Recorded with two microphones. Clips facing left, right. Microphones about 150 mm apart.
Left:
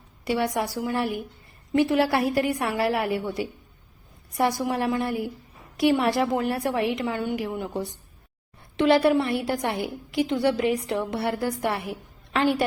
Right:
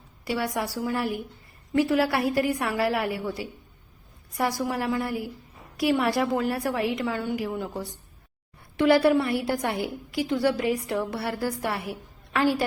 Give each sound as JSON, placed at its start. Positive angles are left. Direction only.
{"t": 0.3, "sound": "a woman's voice", "side_deg": 25}